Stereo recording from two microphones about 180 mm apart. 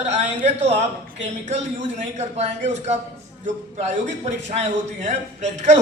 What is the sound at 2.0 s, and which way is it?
A man's voice, 40° right (ahead or behind).